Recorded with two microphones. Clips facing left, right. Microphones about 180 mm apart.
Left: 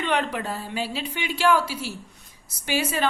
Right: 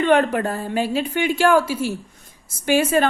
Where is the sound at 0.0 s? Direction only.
50° right (ahead or behind).